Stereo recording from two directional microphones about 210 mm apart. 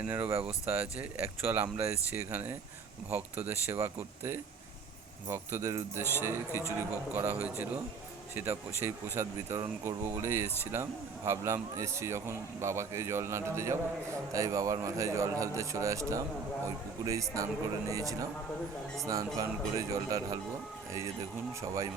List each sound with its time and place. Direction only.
0.1 s speech: 10° right (ahead or behind)
8.8 s speech: 10° right (ahead or behind)